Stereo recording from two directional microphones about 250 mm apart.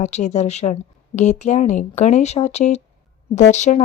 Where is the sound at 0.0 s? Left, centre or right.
Left.